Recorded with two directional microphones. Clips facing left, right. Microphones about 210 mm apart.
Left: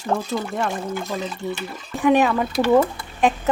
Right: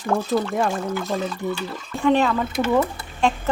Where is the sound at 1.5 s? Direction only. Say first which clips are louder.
Right 1 dB; 20° left (ahead or behind).